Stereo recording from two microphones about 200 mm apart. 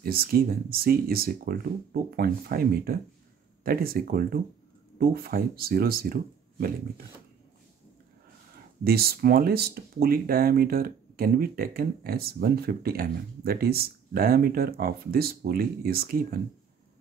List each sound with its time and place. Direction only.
0.0 s speech: 50° right (ahead or behind)
8.8 s speech: 50° right (ahead or behind)